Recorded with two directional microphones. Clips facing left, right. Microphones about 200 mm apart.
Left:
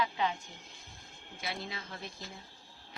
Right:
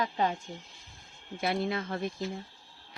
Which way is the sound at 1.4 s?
55° right (ahead or behind).